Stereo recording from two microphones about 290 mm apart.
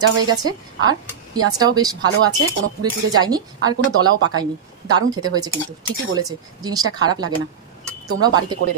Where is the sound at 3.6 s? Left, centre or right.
Centre.